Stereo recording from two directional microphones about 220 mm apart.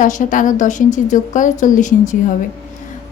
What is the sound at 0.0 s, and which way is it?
Speech, 35° left (ahead or behind).